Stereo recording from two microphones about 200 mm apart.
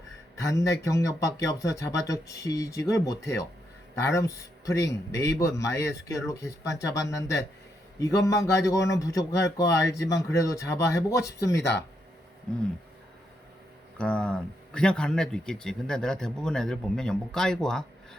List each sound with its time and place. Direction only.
0.4 s a man's voice: 15° left (ahead or behind)
14.0 s speech: 5° left (ahead or behind)